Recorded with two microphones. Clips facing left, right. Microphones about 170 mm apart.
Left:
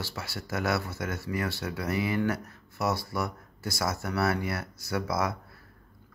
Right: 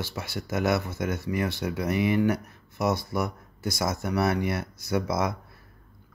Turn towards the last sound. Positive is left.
turn(degrees=-20)  # may be behind; listen again after turning